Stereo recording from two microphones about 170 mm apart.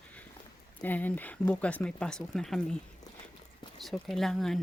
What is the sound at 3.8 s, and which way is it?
Speech, centre (ahead or behind).